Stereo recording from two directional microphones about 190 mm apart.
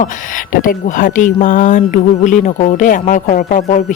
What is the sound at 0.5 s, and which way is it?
Speech, 45° left (ahead or behind).